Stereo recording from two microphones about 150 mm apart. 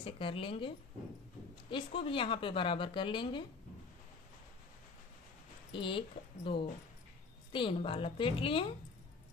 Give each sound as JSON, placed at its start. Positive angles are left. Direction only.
{"t": 0.0, "sound": "a woman's voice", "side_deg": 35}
{"t": 5.7, "sound": "a woman's voice", "side_deg": 35}